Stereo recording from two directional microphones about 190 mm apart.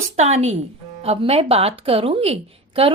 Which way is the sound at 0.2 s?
35° right (ahead or behind).